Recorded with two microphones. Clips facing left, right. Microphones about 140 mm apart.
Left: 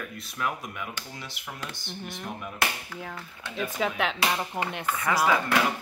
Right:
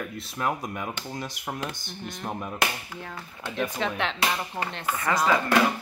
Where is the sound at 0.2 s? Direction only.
35° right (ahead or behind).